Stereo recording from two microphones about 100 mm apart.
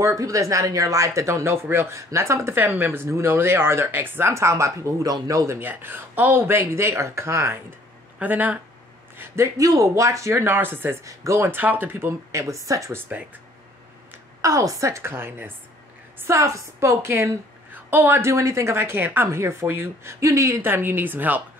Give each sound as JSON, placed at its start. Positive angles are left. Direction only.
{"t": 0.0, "sound": "speech", "side_deg": -35}
{"t": 5.6, "sound": "speech", "side_deg": -20}
{"t": 8.2, "sound": "speech", "side_deg": -15}
{"t": 14.4, "sound": "speech", "side_deg": -35}